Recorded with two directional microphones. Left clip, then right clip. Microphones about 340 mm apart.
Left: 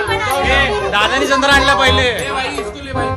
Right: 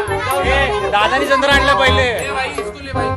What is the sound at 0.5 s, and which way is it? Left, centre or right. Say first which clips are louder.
Speech: left 1 dB; centre.